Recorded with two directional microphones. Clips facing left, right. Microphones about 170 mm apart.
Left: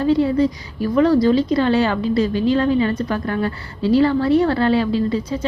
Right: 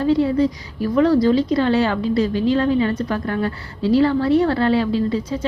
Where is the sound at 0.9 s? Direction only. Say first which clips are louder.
Left 1 dB; 15° left (ahead or behind).